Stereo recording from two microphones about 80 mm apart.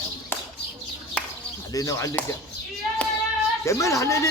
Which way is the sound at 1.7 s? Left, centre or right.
Left.